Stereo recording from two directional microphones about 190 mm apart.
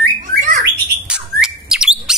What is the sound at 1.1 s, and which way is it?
Bird, 5° right (ahead or behind).